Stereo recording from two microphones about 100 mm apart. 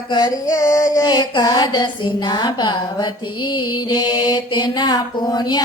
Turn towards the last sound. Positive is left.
turn(degrees=45)  # may be behind; listen again after turning